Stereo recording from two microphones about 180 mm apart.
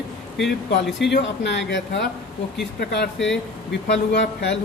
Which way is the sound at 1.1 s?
75° left (ahead or behind).